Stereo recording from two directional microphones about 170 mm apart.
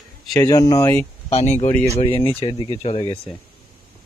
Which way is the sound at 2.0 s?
30° left (ahead or behind).